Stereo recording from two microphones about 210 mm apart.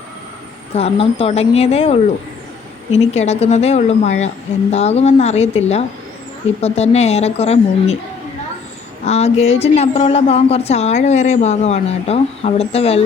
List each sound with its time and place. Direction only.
0.8 s a woman's voice: 30° left (ahead or behind)
9.0 s a woman's voice: 30° left (ahead or behind)